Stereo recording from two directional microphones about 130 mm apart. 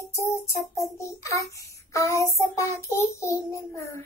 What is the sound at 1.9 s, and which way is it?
Child singing, 25° left (ahead or behind).